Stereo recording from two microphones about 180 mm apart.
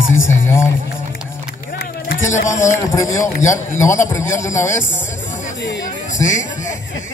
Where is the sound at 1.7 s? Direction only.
55° left (ahead or behind).